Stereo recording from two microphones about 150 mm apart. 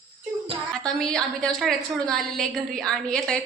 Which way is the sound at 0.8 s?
5° left (ahead or behind).